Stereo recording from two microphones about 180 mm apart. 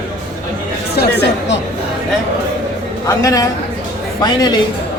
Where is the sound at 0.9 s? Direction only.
70° left (ahead or behind).